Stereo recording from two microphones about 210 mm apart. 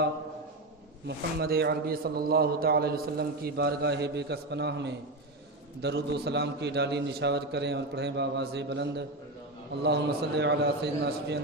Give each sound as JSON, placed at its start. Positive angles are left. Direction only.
{"t": 1.0, "sound": "a man's voice", "side_deg": -50}